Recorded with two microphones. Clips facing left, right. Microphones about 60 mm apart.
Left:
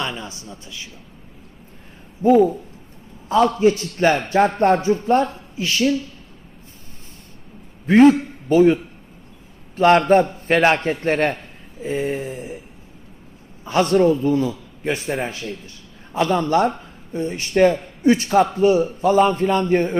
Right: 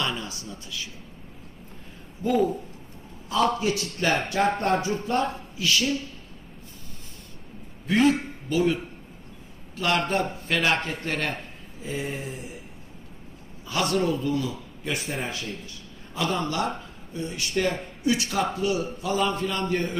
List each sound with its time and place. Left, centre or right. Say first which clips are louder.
0.0 s speech: left 2 dB; left
2.2 s speech: left 9 dB; left
7.9 s a man's voice: left 9 dB; left
13.7 s speech: left 9 dB; left